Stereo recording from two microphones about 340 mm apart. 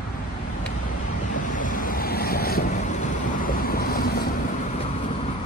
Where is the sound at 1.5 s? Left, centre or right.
Left.